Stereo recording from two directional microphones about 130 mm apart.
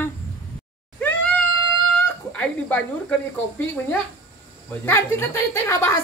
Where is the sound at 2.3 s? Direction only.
10° left (ahead or behind).